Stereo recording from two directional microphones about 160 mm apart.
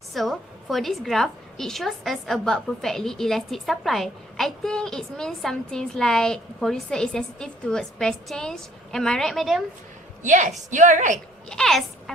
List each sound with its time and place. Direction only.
0.1 s a woman's voice: centre (ahead or behind)
10.2 s a woman's voice: 50° right (ahead or behind)
11.4 s a child's voice: 5° left (ahead or behind)